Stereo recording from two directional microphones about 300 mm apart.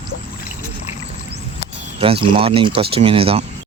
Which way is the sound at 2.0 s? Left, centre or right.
Centre.